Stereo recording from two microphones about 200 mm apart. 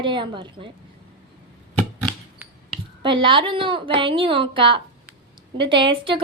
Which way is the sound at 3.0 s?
25° right (ahead or behind).